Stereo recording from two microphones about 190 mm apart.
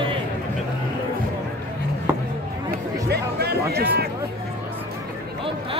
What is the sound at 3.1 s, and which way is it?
Music, 55° right (ahead or behind).